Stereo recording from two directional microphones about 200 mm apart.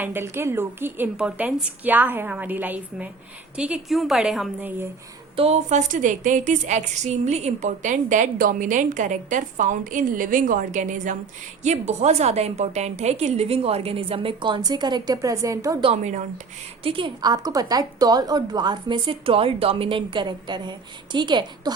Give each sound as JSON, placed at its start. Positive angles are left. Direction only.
{"t": 0.0, "sound": "a woman's voice", "side_deg": -10}
{"t": 5.4, "sound": "a woman's voice", "side_deg": -35}
{"t": 15.9, "sound": "a woman's voice", "side_deg": -35}